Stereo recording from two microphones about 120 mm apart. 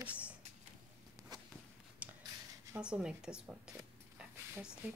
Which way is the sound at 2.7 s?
10° right (ahead or behind).